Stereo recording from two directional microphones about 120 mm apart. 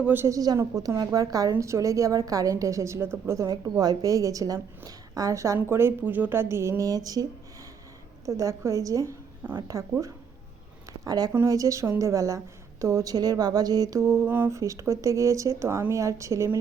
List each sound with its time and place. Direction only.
0.0 s a woman's voice: 15° right (ahead or behind)
11.0 s a woman's voice: 35° right (ahead or behind)